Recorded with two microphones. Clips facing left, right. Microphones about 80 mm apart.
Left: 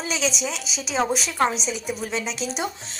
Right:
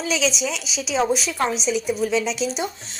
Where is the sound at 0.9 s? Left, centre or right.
Centre.